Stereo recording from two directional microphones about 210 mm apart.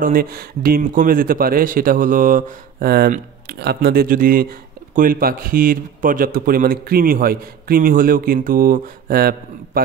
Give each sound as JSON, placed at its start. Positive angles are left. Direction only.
{"t": 0.0, "sound": "a man's voice", "side_deg": -45}